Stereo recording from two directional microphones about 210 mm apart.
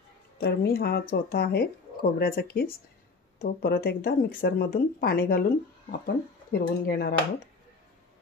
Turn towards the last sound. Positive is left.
turn(degrees=50)  # may be behind; listen again after turning